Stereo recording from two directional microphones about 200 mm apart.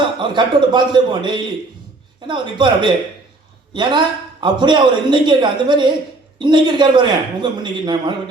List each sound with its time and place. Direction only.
0.2 s speech: 25° right (ahead or behind)